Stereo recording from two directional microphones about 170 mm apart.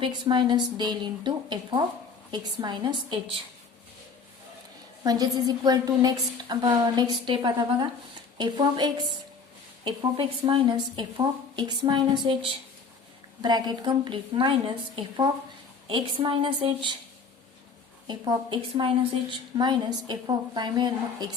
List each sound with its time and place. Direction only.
0.0 s a woman's voice: 25° right (ahead or behind)
5.0 s a woman's voice: 20° right (ahead or behind)
18.1 s a woman's voice: 25° right (ahead or behind)